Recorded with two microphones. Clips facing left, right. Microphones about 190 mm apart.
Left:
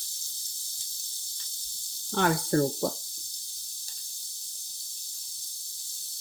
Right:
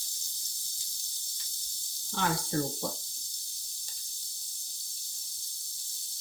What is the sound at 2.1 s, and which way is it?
Speech, 60° left (ahead or behind).